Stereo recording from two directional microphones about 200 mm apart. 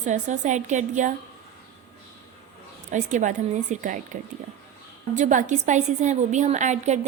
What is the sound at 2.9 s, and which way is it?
A woman's voice, 40° right (ahead or behind).